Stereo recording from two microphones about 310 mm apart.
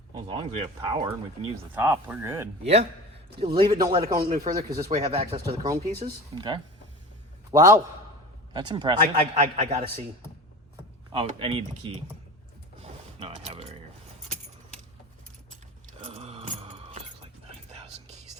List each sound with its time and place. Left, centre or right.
0.1 s speech: centre
4.3 s speech: right
4.5 s speech: centre
11.1 s speech: centre
12.8 s a sound: right
16.0 s a sound: centre